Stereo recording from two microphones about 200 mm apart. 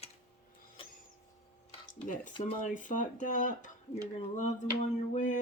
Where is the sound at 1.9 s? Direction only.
40° left (ahead or behind).